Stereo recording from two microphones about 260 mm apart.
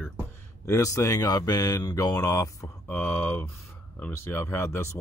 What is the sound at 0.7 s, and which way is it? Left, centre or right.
Speech, centre.